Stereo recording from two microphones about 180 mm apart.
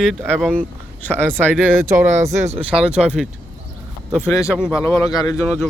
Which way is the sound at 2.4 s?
35° right (ahead or behind).